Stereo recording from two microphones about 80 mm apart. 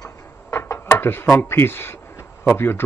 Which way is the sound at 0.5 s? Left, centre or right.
Left.